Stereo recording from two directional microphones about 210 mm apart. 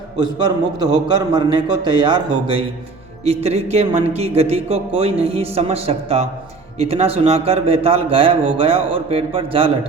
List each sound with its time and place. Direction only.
0.2 s a man's voice: 20° right (ahead or behind)